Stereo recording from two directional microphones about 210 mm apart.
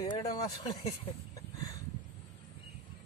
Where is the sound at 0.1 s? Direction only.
20° left (ahead or behind).